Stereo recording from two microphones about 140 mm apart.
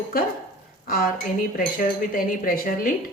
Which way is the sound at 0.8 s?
90° left.